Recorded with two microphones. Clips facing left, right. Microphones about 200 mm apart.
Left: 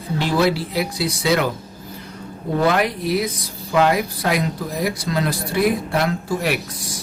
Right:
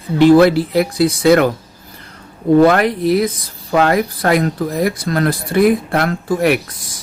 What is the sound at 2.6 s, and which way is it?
Speech, 55° right (ahead or behind).